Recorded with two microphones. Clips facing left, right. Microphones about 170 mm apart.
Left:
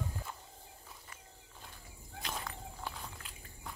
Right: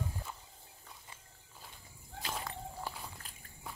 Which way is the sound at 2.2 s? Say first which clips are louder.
Right 2 dB; 5° right (ahead or behind).